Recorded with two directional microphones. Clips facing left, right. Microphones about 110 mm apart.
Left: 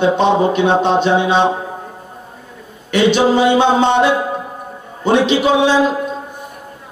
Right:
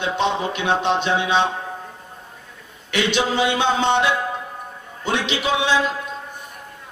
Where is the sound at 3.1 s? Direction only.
45° left (ahead or behind).